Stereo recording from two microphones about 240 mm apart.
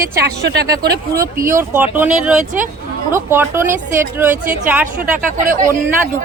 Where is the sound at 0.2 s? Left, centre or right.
Right.